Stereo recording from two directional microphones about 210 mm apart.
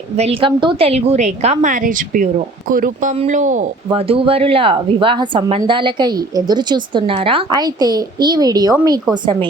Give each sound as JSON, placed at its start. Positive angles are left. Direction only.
{"t": 0.2, "sound": "a woman's voice", "side_deg": -25}